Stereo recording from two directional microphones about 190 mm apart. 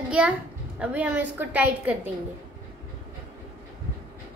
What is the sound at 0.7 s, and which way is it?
A child's voice, 5° right (ahead or behind).